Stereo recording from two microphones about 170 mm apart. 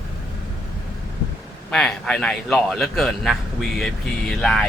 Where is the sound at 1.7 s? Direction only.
5° left (ahead or behind).